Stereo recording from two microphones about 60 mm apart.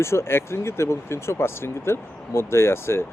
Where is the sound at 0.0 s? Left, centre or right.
Left.